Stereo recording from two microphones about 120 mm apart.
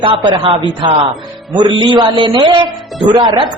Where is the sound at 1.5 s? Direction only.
40° right (ahead or behind).